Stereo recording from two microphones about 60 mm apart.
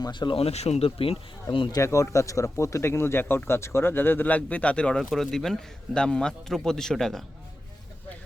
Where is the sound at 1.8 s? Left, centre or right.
Left; by 5.0 s centre.